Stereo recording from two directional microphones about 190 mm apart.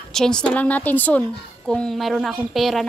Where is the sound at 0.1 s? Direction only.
5° left (ahead or behind).